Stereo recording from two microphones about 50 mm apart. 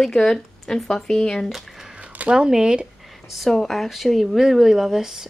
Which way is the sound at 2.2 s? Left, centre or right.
Centre.